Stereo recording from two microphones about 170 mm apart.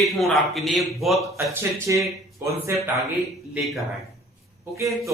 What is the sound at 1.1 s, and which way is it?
A man's voice, 15° right (ahead or behind).